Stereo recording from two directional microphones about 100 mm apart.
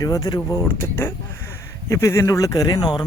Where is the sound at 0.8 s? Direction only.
25° left (ahead or behind).